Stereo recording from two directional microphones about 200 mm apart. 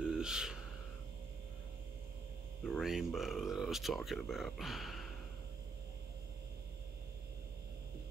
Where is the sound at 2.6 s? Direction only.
Centre (ahead or behind).